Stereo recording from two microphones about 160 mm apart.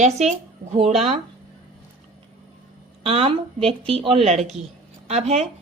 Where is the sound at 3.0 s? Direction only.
35° right (ahead or behind).